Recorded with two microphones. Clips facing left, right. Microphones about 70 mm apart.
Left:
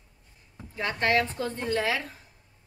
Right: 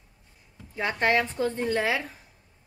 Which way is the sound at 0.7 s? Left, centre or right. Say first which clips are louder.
Right 1 dB; right.